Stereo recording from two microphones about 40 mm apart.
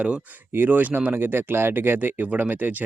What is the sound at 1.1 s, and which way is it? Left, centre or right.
Speech, right.